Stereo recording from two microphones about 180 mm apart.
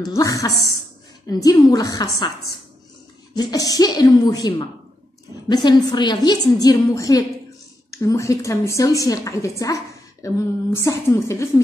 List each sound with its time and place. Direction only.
0.0 s a woman's voice: 20° left (ahead or behind)
3.3 s a woman's voice: 20° left (ahead or behind)